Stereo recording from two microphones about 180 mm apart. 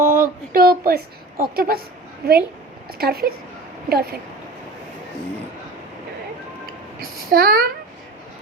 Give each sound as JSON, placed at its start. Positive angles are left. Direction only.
{"t": 0.0, "sound": "a sound", "side_deg": -15}
{"t": 0.5, "sound": "a woman's voice", "side_deg": -55}
{"t": 7.0, "sound": "a woman's voice", "side_deg": -55}